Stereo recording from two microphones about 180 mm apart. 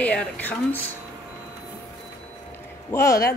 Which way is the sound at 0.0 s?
5° left (ahead or behind).